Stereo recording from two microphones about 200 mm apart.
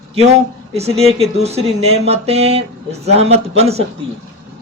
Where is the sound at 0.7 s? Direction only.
30° right (ahead or behind).